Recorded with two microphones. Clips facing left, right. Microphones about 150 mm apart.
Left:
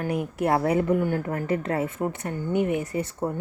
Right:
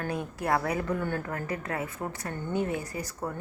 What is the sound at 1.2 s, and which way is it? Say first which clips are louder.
Speech: left 7 dB; 25° left (ahead or behind).